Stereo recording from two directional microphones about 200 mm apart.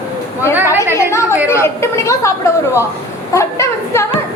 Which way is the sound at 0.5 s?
10° right (ahead or behind).